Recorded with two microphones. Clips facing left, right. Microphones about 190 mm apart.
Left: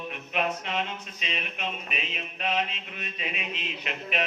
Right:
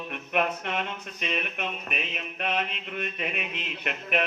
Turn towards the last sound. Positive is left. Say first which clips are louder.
# right 3 dB
turn(degrees=-55)  # may be behind; listen again after turning